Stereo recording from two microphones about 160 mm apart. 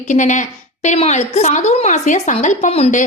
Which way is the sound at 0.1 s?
50° left (ahead or behind).